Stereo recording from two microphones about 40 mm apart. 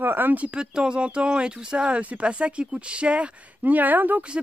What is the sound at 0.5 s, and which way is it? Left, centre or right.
Speech, right.